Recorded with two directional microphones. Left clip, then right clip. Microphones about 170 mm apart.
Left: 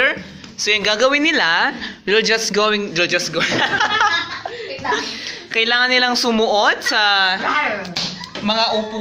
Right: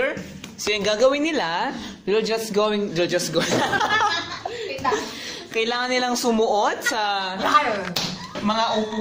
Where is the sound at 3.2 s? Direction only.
30° right (ahead or behind).